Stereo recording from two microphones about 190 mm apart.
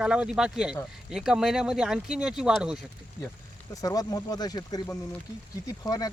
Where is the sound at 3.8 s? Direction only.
20° left (ahead or behind).